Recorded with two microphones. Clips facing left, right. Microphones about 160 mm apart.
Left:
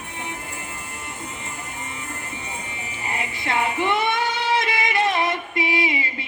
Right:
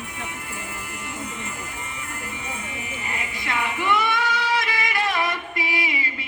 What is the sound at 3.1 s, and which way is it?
Music, 30° left (ahead or behind).